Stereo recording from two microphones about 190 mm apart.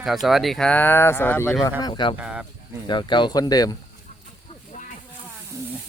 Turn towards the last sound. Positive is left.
turn(degrees=35)  # may be behind; listen again after turning